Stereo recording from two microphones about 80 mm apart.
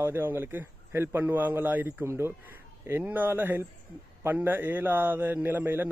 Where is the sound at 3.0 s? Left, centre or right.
Right.